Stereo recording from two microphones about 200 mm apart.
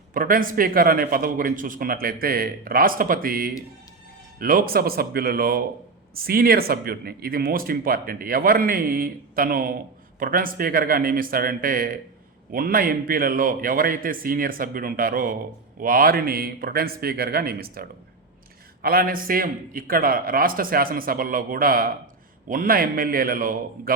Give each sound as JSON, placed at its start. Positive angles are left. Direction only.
{"t": 0.1, "sound": "speech", "side_deg": -45}